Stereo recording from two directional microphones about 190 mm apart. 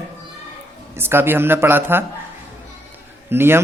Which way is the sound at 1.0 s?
10° right (ahead or behind).